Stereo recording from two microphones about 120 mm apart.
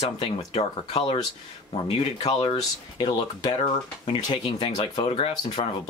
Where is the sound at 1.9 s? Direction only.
35° left (ahead or behind).